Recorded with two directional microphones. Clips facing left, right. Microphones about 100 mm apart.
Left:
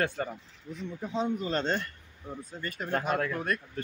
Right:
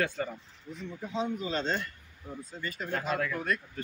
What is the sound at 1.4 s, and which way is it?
Speech, 50° left (ahead or behind).